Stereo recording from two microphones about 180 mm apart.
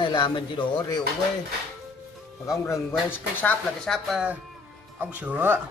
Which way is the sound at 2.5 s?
15° left (ahead or behind).